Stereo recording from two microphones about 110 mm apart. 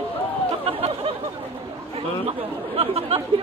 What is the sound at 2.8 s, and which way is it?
Chatter, 65° right (ahead or behind).